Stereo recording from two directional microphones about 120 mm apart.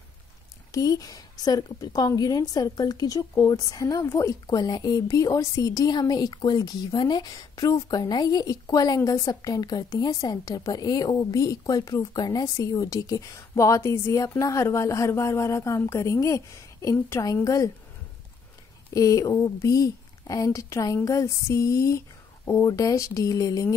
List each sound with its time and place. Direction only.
0.7 s a woman's voice: 30° left (ahead or behind)
18.9 s a woman's voice: 30° left (ahead or behind)